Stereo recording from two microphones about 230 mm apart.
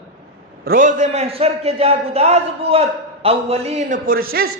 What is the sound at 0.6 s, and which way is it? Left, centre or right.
A man's voice, right.